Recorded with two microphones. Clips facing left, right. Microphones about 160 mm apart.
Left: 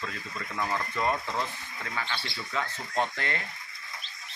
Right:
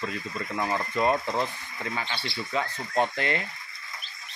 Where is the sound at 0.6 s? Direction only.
20° right (ahead or behind).